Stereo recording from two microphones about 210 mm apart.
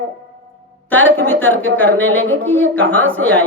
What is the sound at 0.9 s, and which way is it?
A woman's voice, 10° left (ahead or behind).